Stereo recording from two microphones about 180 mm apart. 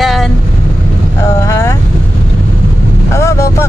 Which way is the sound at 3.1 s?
15° left (ahead or behind).